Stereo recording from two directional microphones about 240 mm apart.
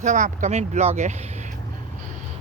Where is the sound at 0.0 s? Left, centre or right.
Right.